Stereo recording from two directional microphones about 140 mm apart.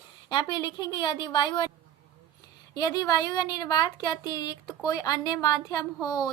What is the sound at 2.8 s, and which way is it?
Speech, 25° left (ahead or behind).